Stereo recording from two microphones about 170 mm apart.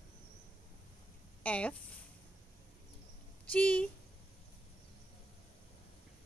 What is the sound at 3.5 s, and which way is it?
Speech, 10° left (ahead or behind).